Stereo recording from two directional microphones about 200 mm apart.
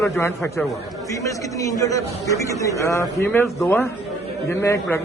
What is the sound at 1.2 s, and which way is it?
Speech, 15° left (ahead or behind).